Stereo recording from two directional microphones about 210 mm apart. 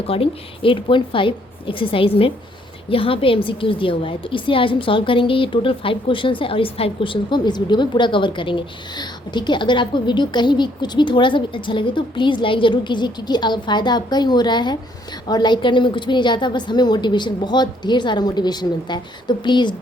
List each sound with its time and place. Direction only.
0.1 s a woman's voice: 25° left (ahead or behind)